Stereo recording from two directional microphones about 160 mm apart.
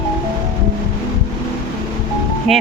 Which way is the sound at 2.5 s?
Centre (ahead or behind).